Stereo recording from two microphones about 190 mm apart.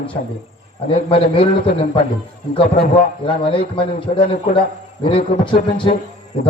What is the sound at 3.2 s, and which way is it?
A man's voice, 30° left (ahead or behind).